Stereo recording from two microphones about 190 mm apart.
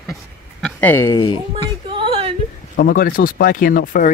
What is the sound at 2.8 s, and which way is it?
Speech, 45° left (ahead or behind).